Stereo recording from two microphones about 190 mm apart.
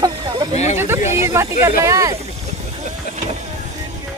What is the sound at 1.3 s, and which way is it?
Speech, 15° right (ahead or behind).